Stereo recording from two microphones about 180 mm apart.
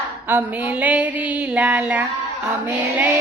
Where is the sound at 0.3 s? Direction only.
10° right (ahead or behind).